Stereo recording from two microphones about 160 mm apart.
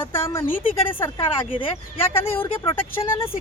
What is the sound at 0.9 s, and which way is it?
Speech, 15° left (ahead or behind).